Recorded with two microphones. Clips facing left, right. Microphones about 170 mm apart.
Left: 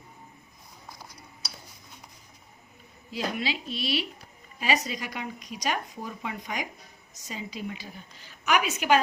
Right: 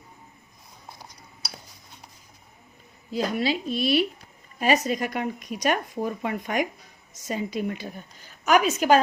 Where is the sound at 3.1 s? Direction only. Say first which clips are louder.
Right 6 dB; 45° right (ahead or behind).